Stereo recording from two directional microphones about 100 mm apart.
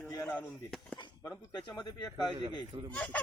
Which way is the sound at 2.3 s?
75° right (ahead or behind).